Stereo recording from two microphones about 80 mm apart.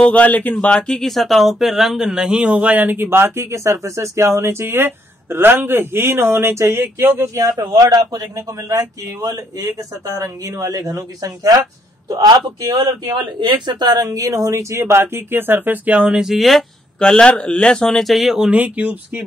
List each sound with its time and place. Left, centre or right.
0.0 s speech: centre; by 7.2 s right
7.3 s speech: right
12.1 s speech: right; by 18.5 s centre
18.5 s speech: centre